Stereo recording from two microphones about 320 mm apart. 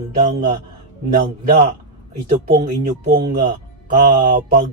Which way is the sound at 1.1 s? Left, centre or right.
Right.